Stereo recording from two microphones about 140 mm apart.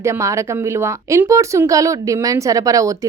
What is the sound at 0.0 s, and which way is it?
Speech, 20° right (ahead or behind).